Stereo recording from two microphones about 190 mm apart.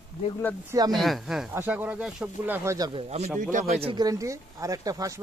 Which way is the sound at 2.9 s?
35° right (ahead or behind).